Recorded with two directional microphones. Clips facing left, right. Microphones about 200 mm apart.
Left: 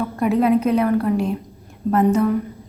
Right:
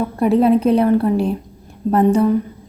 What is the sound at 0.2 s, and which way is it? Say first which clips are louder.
A woman's voice: right 3 dB; 30° right (ahead or behind).